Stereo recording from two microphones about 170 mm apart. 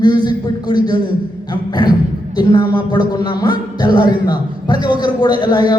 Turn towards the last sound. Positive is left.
turn(degrees=25)  # may be behind; listen again after turning